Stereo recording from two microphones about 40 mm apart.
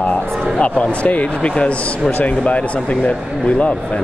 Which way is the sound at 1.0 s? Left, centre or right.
Left.